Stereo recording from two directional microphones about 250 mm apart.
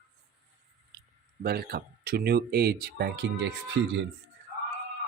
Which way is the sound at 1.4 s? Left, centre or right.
Right.